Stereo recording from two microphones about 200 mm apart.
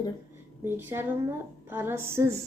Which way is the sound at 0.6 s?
10° right (ahead or behind).